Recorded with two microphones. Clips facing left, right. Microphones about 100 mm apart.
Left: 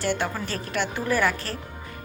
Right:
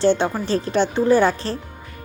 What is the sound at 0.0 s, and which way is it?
A woman's voice, 25° right (ahead or behind).